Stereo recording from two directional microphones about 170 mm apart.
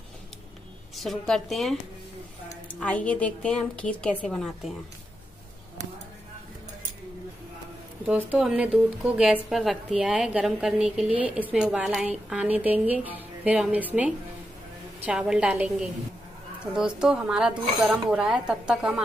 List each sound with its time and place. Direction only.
0.9 s speech: centre (ahead or behind)
2.8 s a woman's voice: 10° left (ahead or behind)
8.1 s a woman's voice: 5° right (ahead or behind)